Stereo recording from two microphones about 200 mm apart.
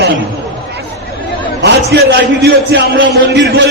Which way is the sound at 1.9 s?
55° right (ahead or behind).